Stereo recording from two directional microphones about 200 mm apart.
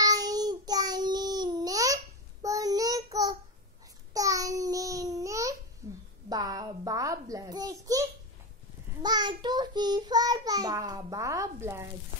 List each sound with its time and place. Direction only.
0.0 s child singing: 20° right (ahead or behind)
4.1 s babbling: 15° right (ahead or behind)
5.8 s a sound: 15° right (ahead or behind)
9.0 s child singing: 20° right (ahead or behind)